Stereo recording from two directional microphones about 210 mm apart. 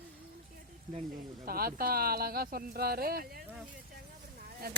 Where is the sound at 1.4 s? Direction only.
45° right (ahead or behind).